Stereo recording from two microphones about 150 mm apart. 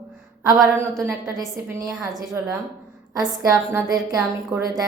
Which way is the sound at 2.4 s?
15° right (ahead or behind).